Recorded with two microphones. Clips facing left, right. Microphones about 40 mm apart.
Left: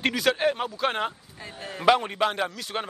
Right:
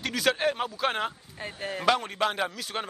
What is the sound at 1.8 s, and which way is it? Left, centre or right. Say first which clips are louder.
Speech: left 4 dB; centre.